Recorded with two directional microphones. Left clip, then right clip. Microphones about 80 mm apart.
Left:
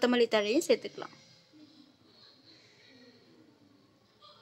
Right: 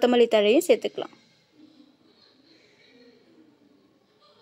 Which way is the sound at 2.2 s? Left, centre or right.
Right.